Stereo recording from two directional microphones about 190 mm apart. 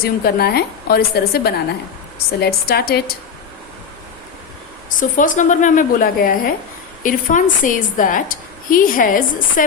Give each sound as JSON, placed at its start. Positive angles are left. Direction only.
{"t": 0.0, "sound": "a woman's voice", "side_deg": 55}
{"t": 4.9, "sound": "a woman's voice", "side_deg": 45}